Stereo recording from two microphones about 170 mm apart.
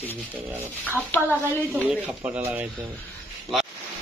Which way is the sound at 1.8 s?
10° right (ahead or behind).